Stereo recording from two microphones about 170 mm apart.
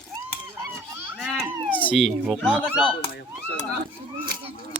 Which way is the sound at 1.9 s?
Centre (ahead or behind).